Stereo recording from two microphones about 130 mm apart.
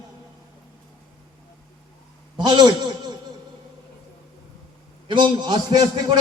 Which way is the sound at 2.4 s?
35° right (ahead or behind).